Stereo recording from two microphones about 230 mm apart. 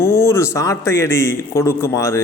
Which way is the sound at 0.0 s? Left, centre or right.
Centre.